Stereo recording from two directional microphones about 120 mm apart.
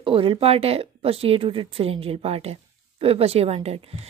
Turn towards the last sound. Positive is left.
turn(degrees=-55)  # may be behind; listen again after turning